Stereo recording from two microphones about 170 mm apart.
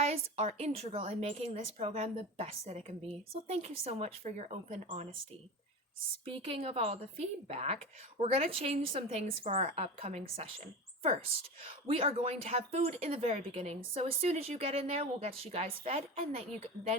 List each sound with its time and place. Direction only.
0.0 s speech: 40° right (ahead or behind)
6.2 s speech: 35° right (ahead or behind)
9.2 s a woman's voice: 50° right (ahead or behind)
11.9 s speech: 35° right (ahead or behind)